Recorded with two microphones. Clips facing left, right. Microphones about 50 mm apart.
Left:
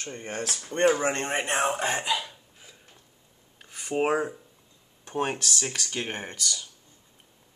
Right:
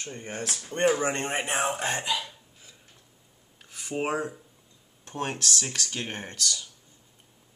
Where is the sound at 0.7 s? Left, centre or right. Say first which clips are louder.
Left 2 dB; centre.